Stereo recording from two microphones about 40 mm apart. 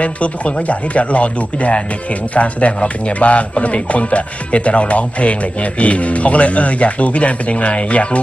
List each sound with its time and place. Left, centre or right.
0.0 s speech: left